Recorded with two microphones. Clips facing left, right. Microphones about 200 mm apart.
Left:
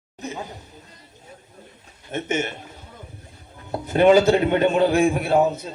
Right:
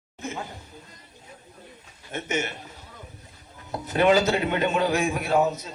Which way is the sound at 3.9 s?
50° left (ahead or behind).